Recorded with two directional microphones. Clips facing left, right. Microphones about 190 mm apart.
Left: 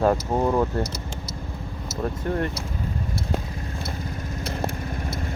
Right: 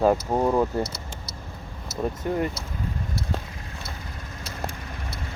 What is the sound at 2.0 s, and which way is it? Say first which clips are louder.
Speech: even; 5° right (ahead or behind).